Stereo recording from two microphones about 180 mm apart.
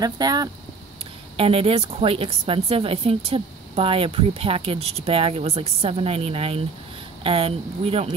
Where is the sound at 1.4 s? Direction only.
30° right (ahead or behind).